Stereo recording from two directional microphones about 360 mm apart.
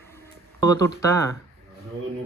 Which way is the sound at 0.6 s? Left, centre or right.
Centre.